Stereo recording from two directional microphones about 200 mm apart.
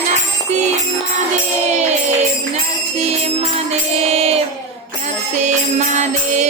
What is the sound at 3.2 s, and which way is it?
Music, 30° right (ahead or behind).